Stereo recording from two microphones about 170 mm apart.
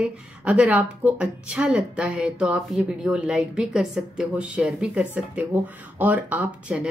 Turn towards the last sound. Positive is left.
turn(degrees=-5)  # may be behind; listen again after turning